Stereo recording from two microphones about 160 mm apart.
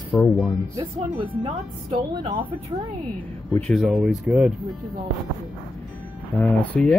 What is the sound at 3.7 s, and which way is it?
Speech, centre (ahead or behind).